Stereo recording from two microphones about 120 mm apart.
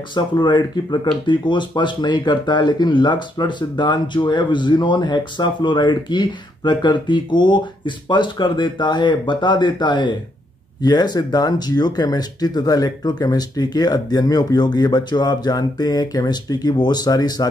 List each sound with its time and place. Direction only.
0.1 s speech: 40° left (ahead or behind)